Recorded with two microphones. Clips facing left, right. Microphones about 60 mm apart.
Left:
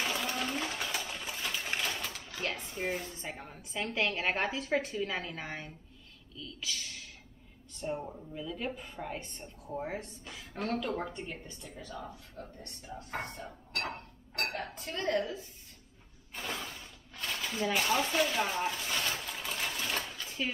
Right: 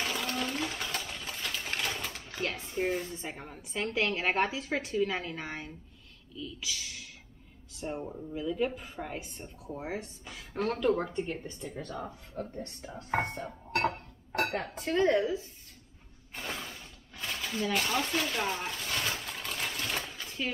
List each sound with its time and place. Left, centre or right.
0.0 s sewing machine: centre
1.9 s pigeon: centre
2.4 s a woman's voice: centre
12.4 s speech: right
12.9 s a woman's voice: right
14.8 s a woman's voice: right
16.3 s a sound: centre
19.1 s sewing machine: centre